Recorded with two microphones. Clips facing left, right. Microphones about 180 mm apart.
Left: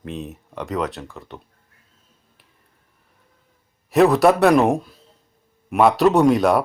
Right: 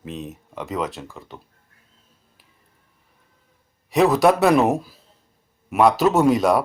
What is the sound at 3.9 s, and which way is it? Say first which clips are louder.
Speech: left 2 dB; centre (ahead or behind).